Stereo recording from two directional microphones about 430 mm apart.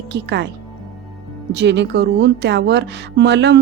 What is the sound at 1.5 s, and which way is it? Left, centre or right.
A woman's voice, right.